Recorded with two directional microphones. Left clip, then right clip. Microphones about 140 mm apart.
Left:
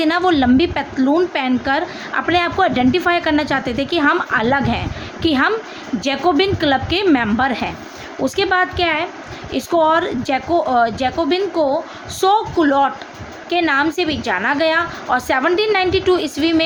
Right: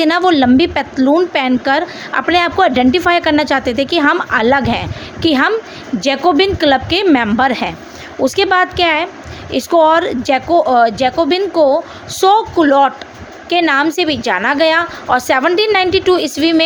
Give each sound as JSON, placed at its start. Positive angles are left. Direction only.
{"t": 0.0, "sound": "a woman's voice", "side_deg": -45}